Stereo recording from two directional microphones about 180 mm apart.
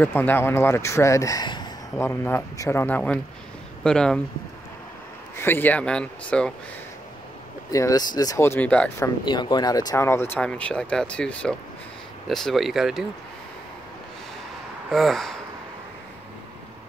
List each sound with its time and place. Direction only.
0.0 s speech: 10° left (ahead or behind)
2.0 s speech: 10° left (ahead or behind)
5.4 s speech: 10° left (ahead or behind)
7.7 s speech: 20° left (ahead or behind)
9.2 s speech: 25° left (ahead or behind); by 13.0 s centre (ahead or behind)
14.9 s speech: centre (ahead or behind)